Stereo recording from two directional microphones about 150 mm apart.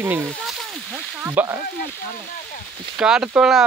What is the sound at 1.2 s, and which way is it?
Speech, 15° right (ahead or behind).